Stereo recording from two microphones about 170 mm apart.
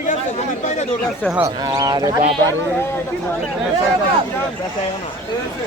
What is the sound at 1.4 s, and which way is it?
Speech, 20° right (ahead or behind).